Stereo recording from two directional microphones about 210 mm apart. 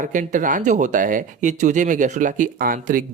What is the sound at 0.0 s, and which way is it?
Speech, 40° right (ahead or behind).